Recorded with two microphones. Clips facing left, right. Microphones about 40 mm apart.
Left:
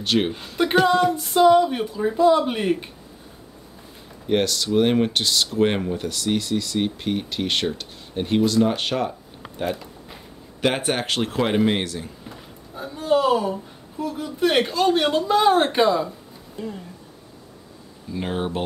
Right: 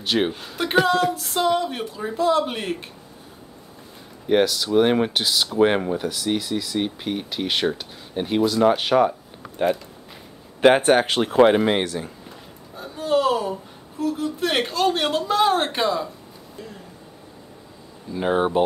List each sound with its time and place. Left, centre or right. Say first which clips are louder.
0.0 s speech: even; centre
4.3 s speech: right 2 dB; centre
10.8 s speech: right 6 dB; centre
16.6 s speech: left 7 dB; centre
18.1 s speech: right 5 dB; centre